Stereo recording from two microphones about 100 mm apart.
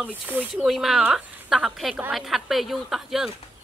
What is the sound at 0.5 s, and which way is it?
A woman's voice, 5° right (ahead or behind).